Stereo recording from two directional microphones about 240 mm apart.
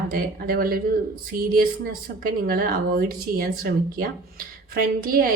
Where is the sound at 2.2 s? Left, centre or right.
Right.